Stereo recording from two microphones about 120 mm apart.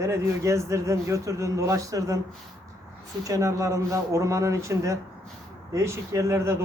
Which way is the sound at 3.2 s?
25° right (ahead or behind).